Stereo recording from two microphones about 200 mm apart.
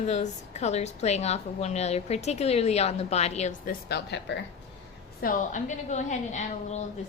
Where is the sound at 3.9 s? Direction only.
55° left (ahead or behind).